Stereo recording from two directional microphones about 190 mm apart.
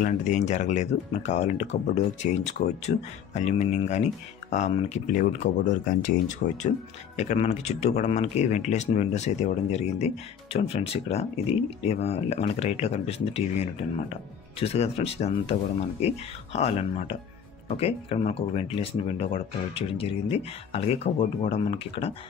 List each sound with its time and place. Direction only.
0.0 s speech: 40° left (ahead or behind)